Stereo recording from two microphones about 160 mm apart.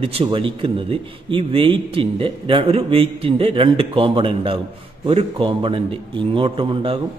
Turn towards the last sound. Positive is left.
turn(degrees=-35)  # may be behind; listen again after turning